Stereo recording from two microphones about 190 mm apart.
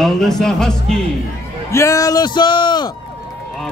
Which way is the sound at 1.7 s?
15° left (ahead or behind).